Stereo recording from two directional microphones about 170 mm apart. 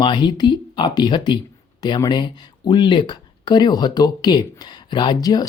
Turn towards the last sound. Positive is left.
turn(degrees=25)  # may be behind; listen again after turning